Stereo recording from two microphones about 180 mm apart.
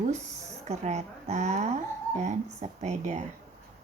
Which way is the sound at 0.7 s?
40° right (ahead or behind).